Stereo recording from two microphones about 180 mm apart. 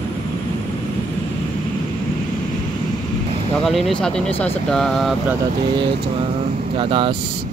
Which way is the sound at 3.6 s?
Centre (ahead or behind).